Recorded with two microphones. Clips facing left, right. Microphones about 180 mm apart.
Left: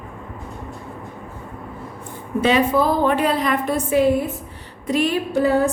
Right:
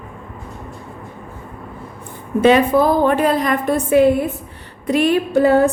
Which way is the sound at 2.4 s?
55° right (ahead or behind).